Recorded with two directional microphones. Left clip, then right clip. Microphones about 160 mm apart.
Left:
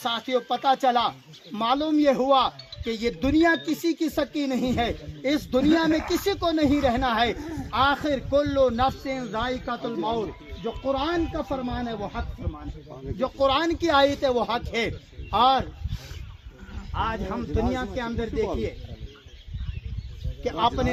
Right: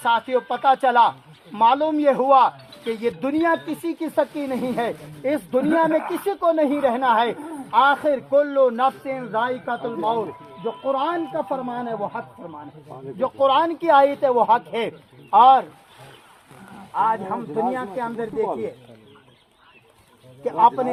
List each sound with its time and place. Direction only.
0.0 s speech: 25° left (ahead or behind)
6.0 s speech: 10° left (ahead or behind)
6.8 s speech: 25° left (ahead or behind)
7.3 s speech: 10° left (ahead or behind); by 11.9 s 30° left (ahead or behind)
11.9 s speech: 10° left (ahead or behind); by 15.6 s 30° left (ahead or behind)
16.9 s speech: 20° left (ahead or behind)
20.4 s speech: 15° left (ahead or behind)